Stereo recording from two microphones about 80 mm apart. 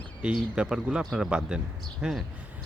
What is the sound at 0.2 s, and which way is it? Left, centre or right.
Speech, centre.